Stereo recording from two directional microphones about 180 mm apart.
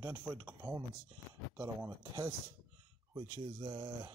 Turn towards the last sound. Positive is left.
turn(degrees=-20)  # may be behind; listen again after turning